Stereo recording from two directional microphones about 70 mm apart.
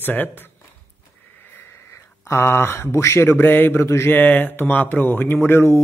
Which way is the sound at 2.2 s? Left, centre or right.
Left.